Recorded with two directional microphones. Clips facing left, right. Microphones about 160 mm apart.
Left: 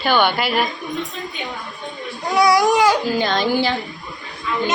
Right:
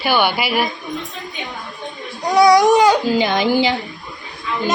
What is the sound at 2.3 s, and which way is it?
Speech, 20° right (ahead or behind).